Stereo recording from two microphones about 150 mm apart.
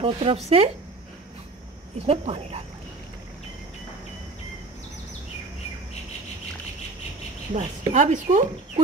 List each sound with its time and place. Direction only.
0.0 s speech: 40° right (ahead or behind)
2.0 s speech: 40° right (ahead or behind)
7.5 s speech: 50° right (ahead or behind)